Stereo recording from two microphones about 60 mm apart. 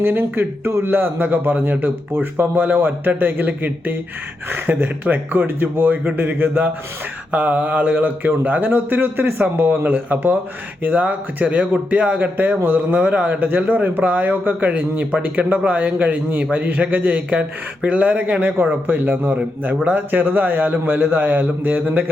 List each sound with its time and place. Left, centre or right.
0.0 s a man's voice: right